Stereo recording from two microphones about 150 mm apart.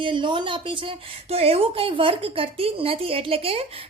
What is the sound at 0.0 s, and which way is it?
Speech, 35° right (ahead or behind).